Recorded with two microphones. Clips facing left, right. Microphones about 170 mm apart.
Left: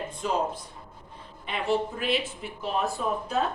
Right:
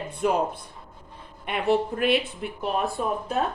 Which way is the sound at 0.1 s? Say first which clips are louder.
Right 6 dB; 60° right (ahead or behind).